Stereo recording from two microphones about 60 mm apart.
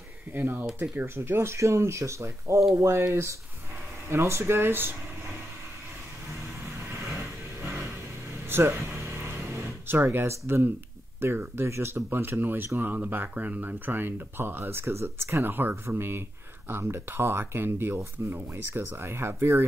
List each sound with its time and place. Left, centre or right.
0.3 s speech: right
8.5 s a sound: right
11.1 s speech: right